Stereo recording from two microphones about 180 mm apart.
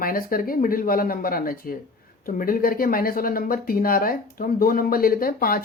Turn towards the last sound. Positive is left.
turn(degrees=55)  # may be behind; listen again after turning